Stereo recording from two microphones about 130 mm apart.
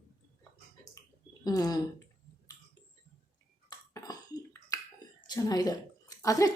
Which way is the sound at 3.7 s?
30° left (ahead or behind).